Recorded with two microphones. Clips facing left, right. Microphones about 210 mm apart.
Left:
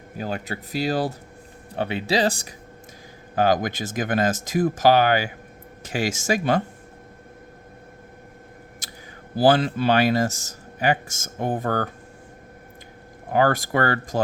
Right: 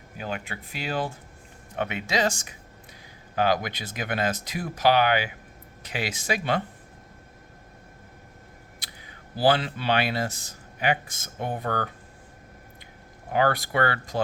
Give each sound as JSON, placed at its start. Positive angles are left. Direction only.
{"t": 0.2, "sound": "speech", "side_deg": 40}
{"t": 3.3, "sound": "speech", "side_deg": 45}
{"t": 8.8, "sound": "a sound", "side_deg": 45}
{"t": 9.3, "sound": "speech", "side_deg": 45}
{"t": 13.3, "sound": "speech", "side_deg": 45}